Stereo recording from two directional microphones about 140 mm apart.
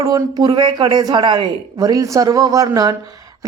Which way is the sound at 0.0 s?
30° right (ahead or behind).